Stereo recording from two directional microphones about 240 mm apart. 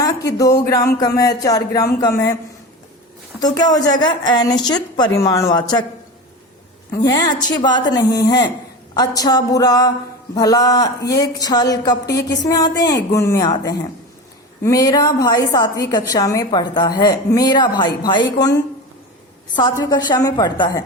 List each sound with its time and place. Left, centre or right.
0.3 s a woman's voice: centre
3.4 s a woman's voice: centre
6.9 s a woman's voice: centre
14.6 s a woman's voice: centre
19.8 s a woman's voice: centre